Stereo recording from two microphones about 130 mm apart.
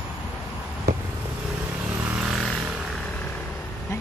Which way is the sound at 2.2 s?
5° right (ahead or behind).